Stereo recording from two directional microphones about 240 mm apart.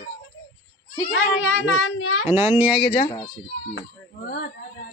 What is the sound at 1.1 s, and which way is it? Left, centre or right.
A child's voice, left.